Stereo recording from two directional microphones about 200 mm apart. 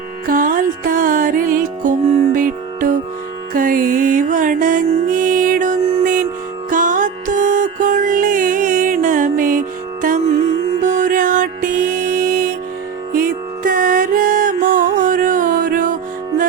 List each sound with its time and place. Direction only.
0.3 s music: 45° right (ahead or behind)